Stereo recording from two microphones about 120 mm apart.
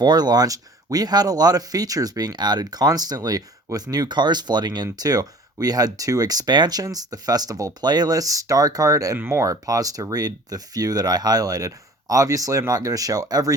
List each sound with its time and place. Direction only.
0.0 s speech: 35° right (ahead or behind)